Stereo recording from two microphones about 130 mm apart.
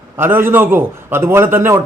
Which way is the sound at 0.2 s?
15° right (ahead or behind).